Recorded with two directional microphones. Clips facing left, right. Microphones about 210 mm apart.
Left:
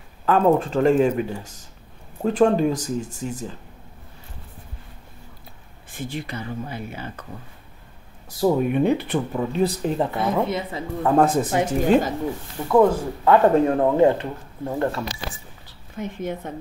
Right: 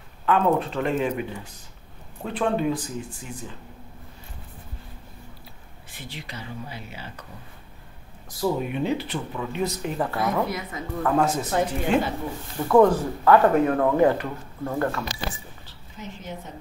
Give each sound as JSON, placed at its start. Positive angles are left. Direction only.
{"t": 0.2, "sound": "speech", "side_deg": 40}
{"t": 5.9, "sound": "speech", "side_deg": 50}
{"t": 8.4, "sound": "speech", "side_deg": 35}
{"t": 8.7, "sound": "speech", "side_deg": 55}
{"t": 9.4, "sound": "speech", "side_deg": 35}
{"t": 11.1, "sound": "speech", "side_deg": 50}
{"t": 12.6, "sound": "speech", "side_deg": 5}
{"t": 13.2, "sound": "speech", "side_deg": 25}
{"t": 16.0, "sound": "speech", "side_deg": 55}